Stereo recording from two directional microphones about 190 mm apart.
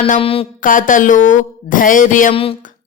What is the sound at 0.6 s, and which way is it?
Speech, 45° left (ahead or behind).